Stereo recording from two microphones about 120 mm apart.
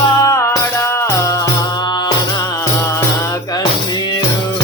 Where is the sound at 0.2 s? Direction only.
25° left (ahead or behind).